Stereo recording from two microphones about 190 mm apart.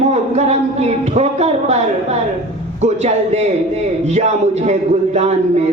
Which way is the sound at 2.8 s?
35° right (ahead or behind).